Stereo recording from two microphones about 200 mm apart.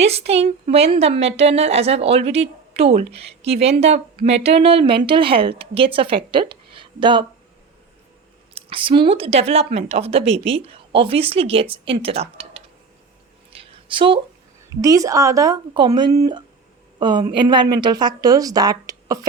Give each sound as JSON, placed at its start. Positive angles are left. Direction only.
{"t": 0.0, "sound": "a woman's voice", "side_deg": -30}
{"t": 8.5, "sound": "speech", "side_deg": -25}
{"t": 13.5, "sound": "a sound", "side_deg": -30}
{"t": 14.8, "sound": "a woman's voice", "side_deg": -15}